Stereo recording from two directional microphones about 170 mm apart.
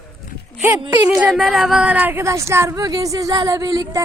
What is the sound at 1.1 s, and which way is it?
Speech, centre (ahead or behind).